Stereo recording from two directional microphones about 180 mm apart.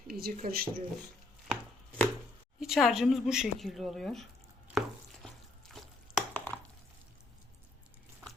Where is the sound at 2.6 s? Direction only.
Centre (ahead or behind).